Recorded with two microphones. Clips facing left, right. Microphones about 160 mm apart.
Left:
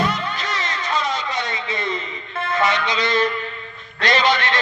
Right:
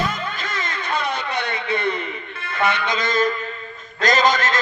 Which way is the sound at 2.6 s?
55° right (ahead or behind).